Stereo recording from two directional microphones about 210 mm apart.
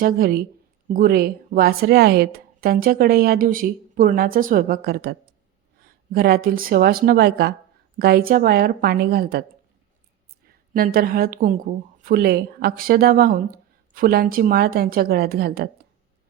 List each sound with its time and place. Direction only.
0.0 s a woman's voice: 45° right (ahead or behind)
10.4 s a woman's voice: 45° right (ahead or behind)